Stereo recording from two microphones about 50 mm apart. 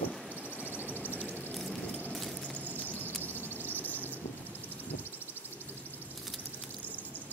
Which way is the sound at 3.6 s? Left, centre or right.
Left.